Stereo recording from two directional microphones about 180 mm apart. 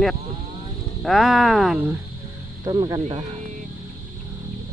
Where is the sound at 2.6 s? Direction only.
25° right (ahead or behind).